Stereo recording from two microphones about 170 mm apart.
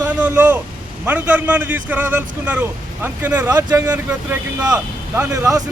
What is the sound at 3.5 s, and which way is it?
Speech, 20° right (ahead or behind).